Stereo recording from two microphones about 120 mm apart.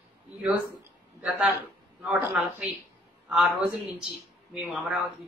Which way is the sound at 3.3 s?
5° right (ahead or behind).